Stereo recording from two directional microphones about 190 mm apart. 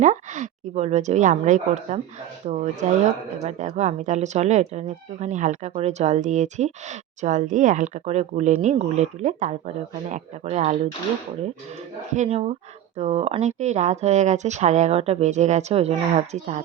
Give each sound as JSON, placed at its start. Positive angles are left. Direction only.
{"t": 0.0, "sound": "speech", "side_deg": -40}
{"t": 12.1, "sound": "speech", "side_deg": -35}